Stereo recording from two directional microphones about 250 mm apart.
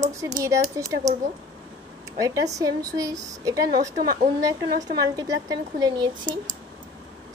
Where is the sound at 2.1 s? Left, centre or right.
Centre.